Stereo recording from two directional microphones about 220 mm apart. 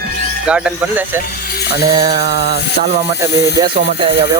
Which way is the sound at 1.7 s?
20° right (ahead or behind).